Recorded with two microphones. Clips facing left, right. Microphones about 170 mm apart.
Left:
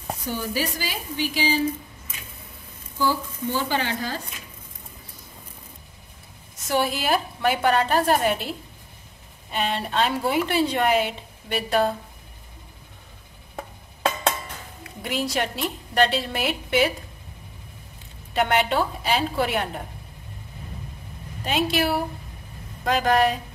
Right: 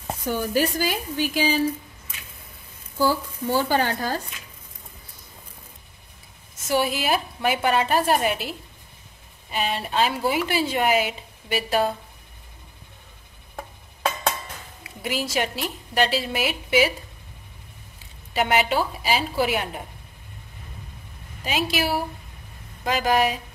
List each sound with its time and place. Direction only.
0.3 s a woman's voice: 50° right (ahead or behind)
3.0 s a woman's voice: 40° right (ahead or behind)
6.5 s a woman's voice: centre (ahead or behind)
14.8 s a woman's voice: 5° right (ahead or behind)
18.3 s a woman's voice: centre (ahead or behind)
21.5 s a woman's voice: centre (ahead or behind)